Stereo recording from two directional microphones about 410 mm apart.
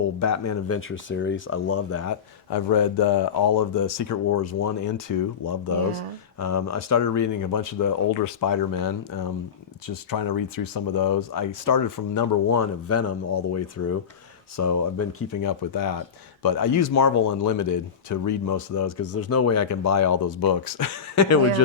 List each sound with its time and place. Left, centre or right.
0.2 s speech: left
2.5 s speech: left
15.4 s speech: left